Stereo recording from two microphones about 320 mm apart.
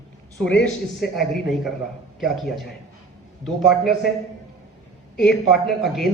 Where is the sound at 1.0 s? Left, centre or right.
Centre.